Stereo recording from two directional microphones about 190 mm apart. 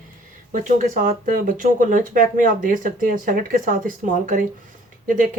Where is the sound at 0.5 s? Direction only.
40° right (ahead or behind).